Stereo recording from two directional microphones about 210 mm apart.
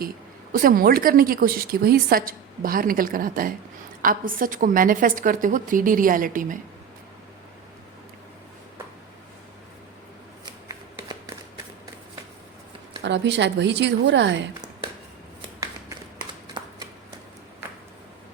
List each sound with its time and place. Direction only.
0.5 s a woman's voice: 45° right (ahead or behind)
10.7 s shuffling cards: 15° right (ahead or behind)
13.0 s a woman's voice: 55° right (ahead or behind)
16.6 s shuffling cards: 20° right (ahead or behind)